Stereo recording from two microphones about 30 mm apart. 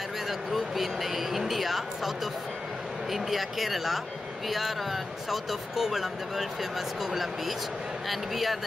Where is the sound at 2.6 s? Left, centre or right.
Centre.